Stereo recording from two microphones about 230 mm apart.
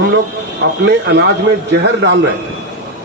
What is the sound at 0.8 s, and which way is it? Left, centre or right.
Speech, right.